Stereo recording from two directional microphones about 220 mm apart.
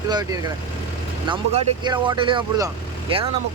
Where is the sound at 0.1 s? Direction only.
20° right (ahead or behind).